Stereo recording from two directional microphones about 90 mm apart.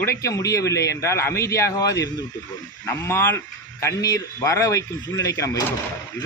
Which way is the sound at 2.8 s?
30° left (ahead or behind).